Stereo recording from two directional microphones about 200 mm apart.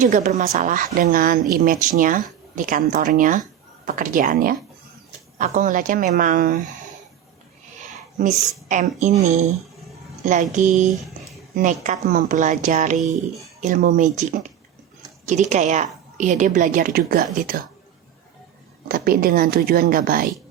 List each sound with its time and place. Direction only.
0.0 s speech: 35° right (ahead or behind)
7.8 s a sound: 40° right (ahead or behind)
8.7 s speech: 40° right (ahead or behind)
10.2 s speech: 40° right (ahead or behind)
18.9 s speech: 45° right (ahead or behind)